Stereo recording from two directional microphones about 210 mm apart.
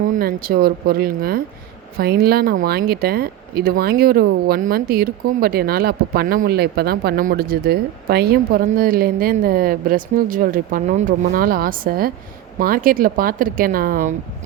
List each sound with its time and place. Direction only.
0.0 s speech: 40° right (ahead or behind)